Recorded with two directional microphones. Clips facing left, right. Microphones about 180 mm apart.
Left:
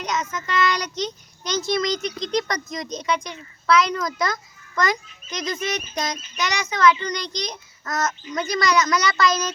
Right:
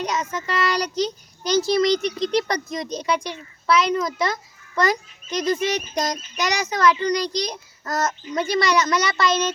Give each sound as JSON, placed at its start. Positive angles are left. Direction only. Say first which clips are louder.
{"t": 0.0, "sound": "a child's voice", "louder": "right 2 dB", "side_deg": -35}